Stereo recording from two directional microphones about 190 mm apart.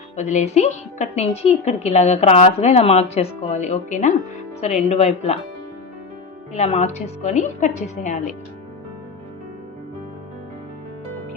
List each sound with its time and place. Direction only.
0.2 s a woman's voice: 40° left (ahead or behind)
6.5 s a woman's voice: 35° left (ahead or behind)